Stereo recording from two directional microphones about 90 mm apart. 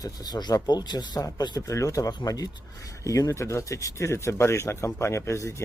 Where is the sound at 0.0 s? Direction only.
50° left (ahead or behind).